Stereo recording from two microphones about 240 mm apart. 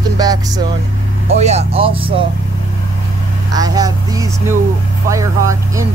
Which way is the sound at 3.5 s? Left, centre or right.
Centre.